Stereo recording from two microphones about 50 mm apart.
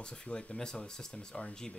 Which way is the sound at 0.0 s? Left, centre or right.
Centre.